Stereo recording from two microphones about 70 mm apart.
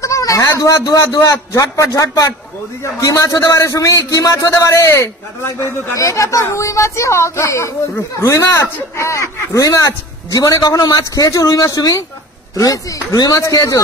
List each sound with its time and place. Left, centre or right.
0.0 s a man's voice: left
4.6 s a man's voice: left
13.4 s a man's voice: left